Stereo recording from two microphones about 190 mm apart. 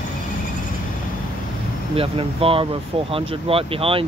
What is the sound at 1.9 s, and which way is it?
Speech, 30° right (ahead or behind).